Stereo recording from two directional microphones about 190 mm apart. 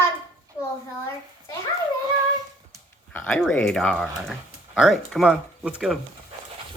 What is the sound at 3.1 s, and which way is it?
Speech, 10° left (ahead or behind).